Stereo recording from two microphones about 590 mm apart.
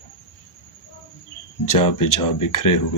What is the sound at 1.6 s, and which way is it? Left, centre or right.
Speech, left.